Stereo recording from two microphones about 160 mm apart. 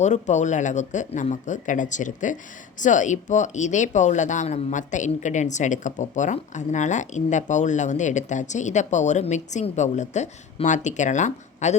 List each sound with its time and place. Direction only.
0.0 s speech: 45° left (ahead or behind)